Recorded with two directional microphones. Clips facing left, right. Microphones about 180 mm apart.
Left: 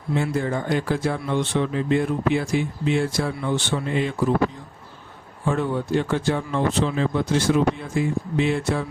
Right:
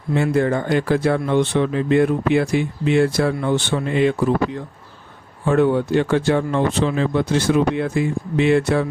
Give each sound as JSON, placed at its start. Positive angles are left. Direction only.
{"t": 0.1, "sound": "speech", "side_deg": -65}
{"t": 5.5, "sound": "speech", "side_deg": -70}